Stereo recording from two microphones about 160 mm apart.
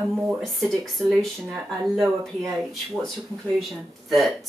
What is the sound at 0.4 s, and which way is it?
Speech, centre (ahead or behind).